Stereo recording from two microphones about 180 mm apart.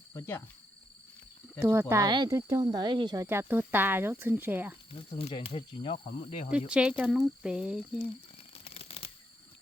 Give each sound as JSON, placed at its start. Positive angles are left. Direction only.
{"t": 0.1, "sound": "speech", "side_deg": 15}
{"t": 1.6, "sound": "speech", "side_deg": -15}
{"t": 3.2, "sound": "speech", "side_deg": -10}
{"t": 4.9, "sound": "speech", "side_deg": 30}
{"t": 6.5, "sound": "speech", "side_deg": -5}
{"t": 8.5, "sound": "a sound", "side_deg": 35}